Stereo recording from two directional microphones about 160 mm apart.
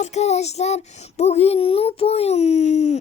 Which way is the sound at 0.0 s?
45° left (ahead or behind).